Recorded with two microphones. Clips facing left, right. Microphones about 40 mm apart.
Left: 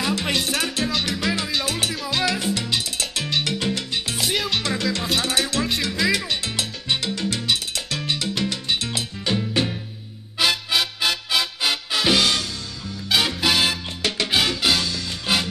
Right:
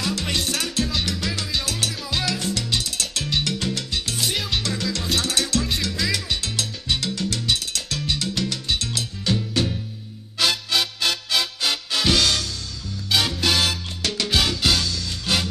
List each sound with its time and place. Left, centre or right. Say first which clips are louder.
0.0 s music: left 2 dB; left
3.4 s salsa music: left 2 dB; centre
4.2 s music: left 3 dB; centre
5.2 s music: left 1 dB; centre
6.4 s salsa music: left 1 dB; centre
10.5 s music: left 1 dB; centre